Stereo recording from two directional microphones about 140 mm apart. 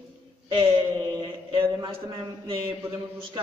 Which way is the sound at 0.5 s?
40° right (ahead or behind).